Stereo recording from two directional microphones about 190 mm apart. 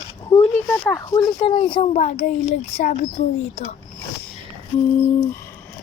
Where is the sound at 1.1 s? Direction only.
25° left (ahead or behind).